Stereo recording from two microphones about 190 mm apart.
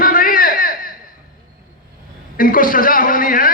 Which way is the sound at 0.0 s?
50° left (ahead or behind).